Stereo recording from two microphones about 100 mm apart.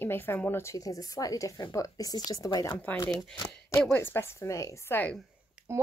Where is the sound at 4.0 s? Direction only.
25° left (ahead or behind).